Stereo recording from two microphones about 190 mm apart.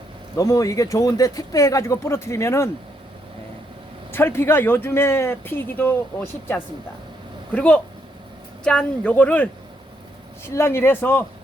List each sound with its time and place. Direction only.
0.3 s speech: 15° left (ahead or behind)
4.1 s speech: 10° left (ahead or behind)
10.5 s speech: 15° left (ahead or behind)